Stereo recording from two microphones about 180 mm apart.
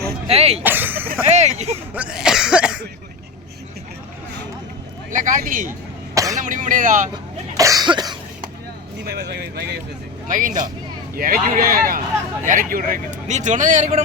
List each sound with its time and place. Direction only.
0.3 s speech: 35° right (ahead or behind)
0.6 s speech: 10° right (ahead or behind)
1.4 s speech: 40° right (ahead or behind)
1.9 s cough: 5° right (ahead or behind)
5.1 s speech: 45° right (ahead or behind)
6.1 s a sound: 20° right (ahead or behind)
6.4 s speech: 45° right (ahead or behind)
7.5 s cough: 20° right (ahead or behind)
9.0 s speech: 65° right (ahead or behind)
10.2 s speech: 45° right (ahead or behind)